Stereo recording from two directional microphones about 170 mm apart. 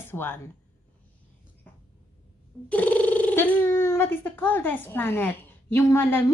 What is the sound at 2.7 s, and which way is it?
A woman's voice, 10° left (ahead or behind).